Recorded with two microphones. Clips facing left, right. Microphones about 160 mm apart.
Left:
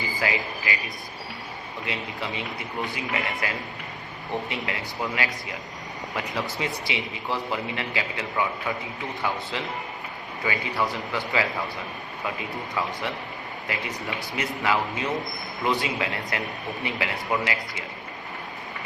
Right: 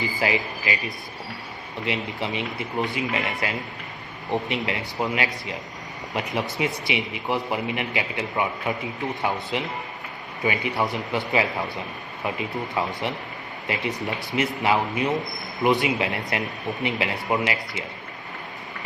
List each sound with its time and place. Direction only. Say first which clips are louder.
0.2 s a man's voice: right 2 dB; 20° right (ahead or behind)
1.8 s a man's voice: right 5 dB; 20° right (ahead or behind)
6.6 s a man's voice: right 4 dB; 20° right (ahead or behind)